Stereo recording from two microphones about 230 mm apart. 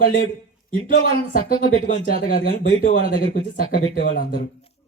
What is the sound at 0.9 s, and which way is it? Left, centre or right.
Speech, left.